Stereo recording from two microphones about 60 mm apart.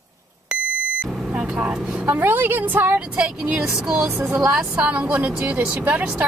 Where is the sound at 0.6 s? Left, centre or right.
Right.